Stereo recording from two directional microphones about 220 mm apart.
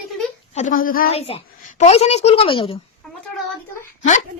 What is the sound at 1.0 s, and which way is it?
A child's voice, 25° left (ahead or behind).